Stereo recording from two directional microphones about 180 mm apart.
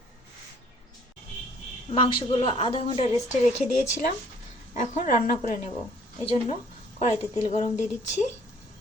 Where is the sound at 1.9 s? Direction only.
25° left (ahead or behind).